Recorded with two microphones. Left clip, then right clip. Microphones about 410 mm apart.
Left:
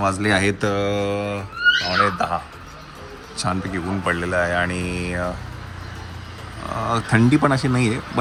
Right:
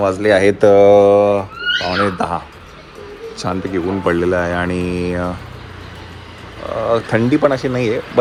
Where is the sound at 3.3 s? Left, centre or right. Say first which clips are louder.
Right 4 dB; centre.